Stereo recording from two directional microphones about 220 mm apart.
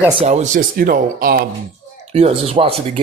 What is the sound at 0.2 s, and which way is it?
Speech, 30° right (ahead or behind).